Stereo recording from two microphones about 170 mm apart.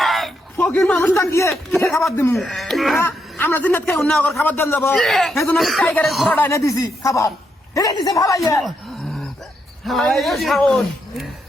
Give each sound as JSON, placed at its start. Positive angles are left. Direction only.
{"t": 0.0, "sound": "a sound", "side_deg": 0}
{"t": 0.6, "sound": "a man's voice", "side_deg": 10}
{"t": 2.3, "sound": "speech", "side_deg": 0}
{"t": 3.0, "sound": "a man's voice", "side_deg": 15}
{"t": 4.3, "sound": "a man's voice", "side_deg": 15}
{"t": 5.0, "sound": "speech", "side_deg": 0}
{"t": 5.3, "sound": "a man's voice", "side_deg": 15}
{"t": 5.5, "sound": "speech", "side_deg": 0}
{"t": 6.3, "sound": "a man's voice", "side_deg": 15}
{"t": 9.8, "sound": "speech", "side_deg": 0}